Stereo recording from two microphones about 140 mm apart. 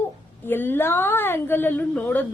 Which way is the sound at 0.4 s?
15° left (ahead or behind).